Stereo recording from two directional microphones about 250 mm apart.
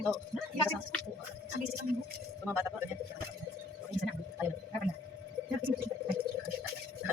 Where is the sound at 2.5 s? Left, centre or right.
Centre.